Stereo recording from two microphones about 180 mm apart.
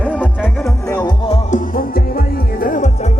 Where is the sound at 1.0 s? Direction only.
30° left (ahead or behind).